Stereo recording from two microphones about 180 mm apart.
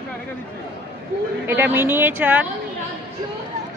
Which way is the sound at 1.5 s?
10° right (ahead or behind).